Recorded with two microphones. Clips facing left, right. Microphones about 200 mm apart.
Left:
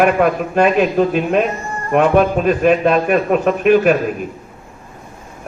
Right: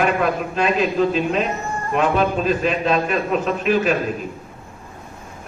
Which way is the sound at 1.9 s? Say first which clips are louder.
Left 6 dB; 55° left (ahead or behind).